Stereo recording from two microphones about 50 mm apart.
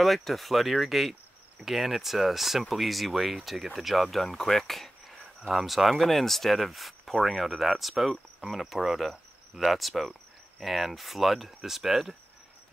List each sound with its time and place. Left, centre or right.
0.0 s speech: centre